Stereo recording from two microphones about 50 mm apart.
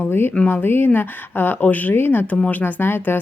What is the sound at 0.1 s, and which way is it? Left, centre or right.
Speech, left.